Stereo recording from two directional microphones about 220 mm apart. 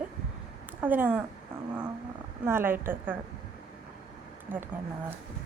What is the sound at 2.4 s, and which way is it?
Speech, 10° right (ahead or behind).